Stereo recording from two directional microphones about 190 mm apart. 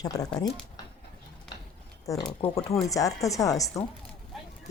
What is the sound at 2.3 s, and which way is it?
Speech, 30° left (ahead or behind).